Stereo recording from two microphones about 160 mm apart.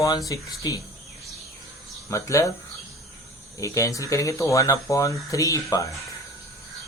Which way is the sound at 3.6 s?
20° left (ahead or behind).